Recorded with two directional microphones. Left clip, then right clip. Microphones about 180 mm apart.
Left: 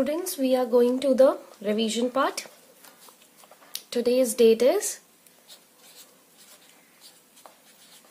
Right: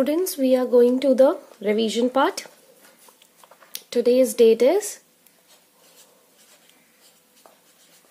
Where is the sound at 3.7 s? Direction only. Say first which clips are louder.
Right 5 dB; 30° right (ahead or behind).